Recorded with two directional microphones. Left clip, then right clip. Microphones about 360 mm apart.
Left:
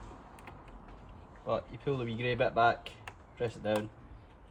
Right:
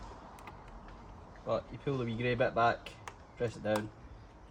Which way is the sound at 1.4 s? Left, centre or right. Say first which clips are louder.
Left 1 dB; centre.